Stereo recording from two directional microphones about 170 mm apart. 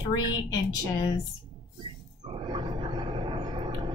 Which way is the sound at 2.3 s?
25° right (ahead or behind).